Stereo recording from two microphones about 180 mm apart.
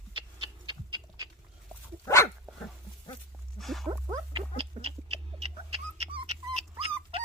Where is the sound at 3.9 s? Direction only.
25° right (ahead or behind).